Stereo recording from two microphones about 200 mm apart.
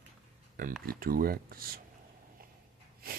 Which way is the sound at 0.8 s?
45° right (ahead or behind).